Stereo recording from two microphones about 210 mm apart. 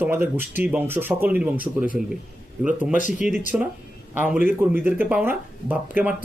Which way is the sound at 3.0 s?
35° left (ahead or behind).